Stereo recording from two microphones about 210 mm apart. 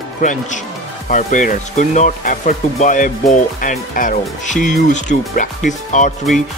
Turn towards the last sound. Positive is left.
turn(degrees=35)  # may be behind; listen again after turning